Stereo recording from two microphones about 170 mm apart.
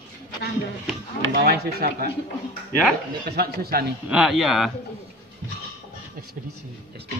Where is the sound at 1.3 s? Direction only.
65° right (ahead or behind).